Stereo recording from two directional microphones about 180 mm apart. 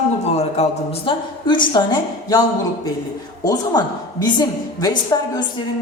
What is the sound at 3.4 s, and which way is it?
A woman's voice, 20° left (ahead or behind).